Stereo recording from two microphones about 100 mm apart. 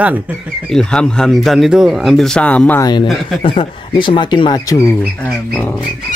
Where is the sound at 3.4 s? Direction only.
60° left (ahead or behind).